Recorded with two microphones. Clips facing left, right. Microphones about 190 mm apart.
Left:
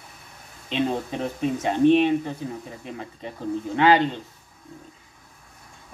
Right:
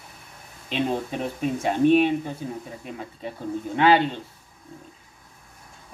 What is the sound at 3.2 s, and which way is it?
Speech, 5° right (ahead or behind).